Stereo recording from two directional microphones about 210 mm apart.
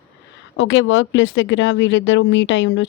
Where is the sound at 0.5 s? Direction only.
65° left (ahead or behind).